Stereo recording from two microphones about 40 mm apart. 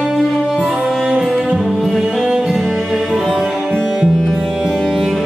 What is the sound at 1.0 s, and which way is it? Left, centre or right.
Music, right.